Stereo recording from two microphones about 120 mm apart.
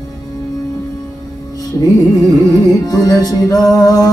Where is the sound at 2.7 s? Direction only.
30° left (ahead or behind).